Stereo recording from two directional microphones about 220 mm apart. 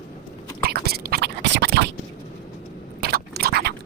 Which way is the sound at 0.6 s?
45° right (ahead or behind).